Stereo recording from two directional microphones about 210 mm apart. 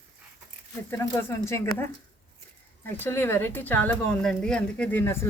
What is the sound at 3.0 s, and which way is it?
A woman's voice, 10° left (ahead or behind).